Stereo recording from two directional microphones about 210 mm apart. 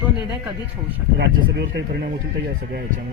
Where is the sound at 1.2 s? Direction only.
55° right (ahead or behind).